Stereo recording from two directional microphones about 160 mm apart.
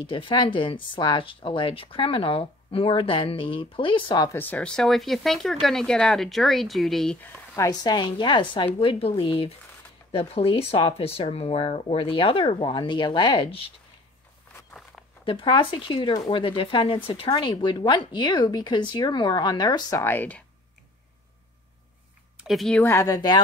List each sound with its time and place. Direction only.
0.0 s speech: 30° left (ahead or behind)
4.4 s speech: 10° left (ahead or behind)
7.5 s speech: 20° left (ahead or behind)
15.2 s speech: 30° left (ahead or behind); by 20.4 s 10° left (ahead or behind)
22.4 s speech: centre (ahead or behind); by 23.4 s 25° left (ahead or behind)